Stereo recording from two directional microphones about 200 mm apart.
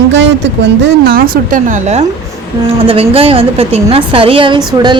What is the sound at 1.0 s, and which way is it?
A woman's voice, 45° right (ahead or behind).